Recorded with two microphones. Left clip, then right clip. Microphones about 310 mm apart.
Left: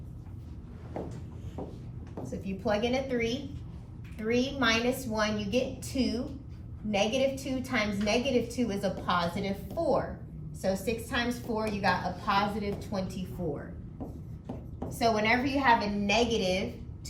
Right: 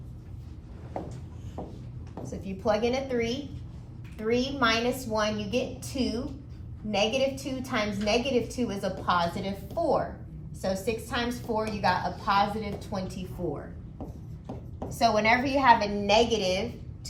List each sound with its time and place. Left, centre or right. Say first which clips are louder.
2.4 s a woman's voice: right 3 dB; centre
14.9 s a woman's voice: right 3 dB; centre